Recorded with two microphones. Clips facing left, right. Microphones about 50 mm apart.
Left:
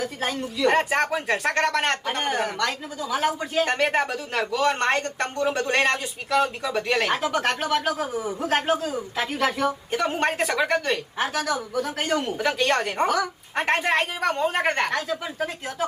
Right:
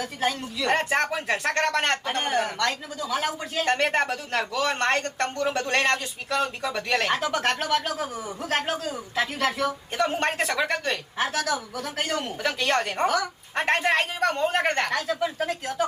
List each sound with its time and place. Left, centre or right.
0.0 s speech: centre
8.4 s speech: centre